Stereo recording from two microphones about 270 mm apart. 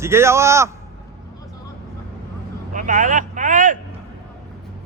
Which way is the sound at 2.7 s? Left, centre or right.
Right.